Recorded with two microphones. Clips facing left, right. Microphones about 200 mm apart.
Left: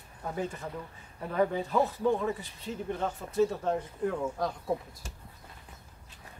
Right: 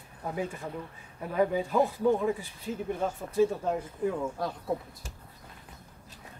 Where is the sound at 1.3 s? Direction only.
10° right (ahead or behind).